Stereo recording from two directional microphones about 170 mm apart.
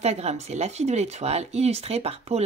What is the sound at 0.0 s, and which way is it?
Speech, 40° right (ahead or behind).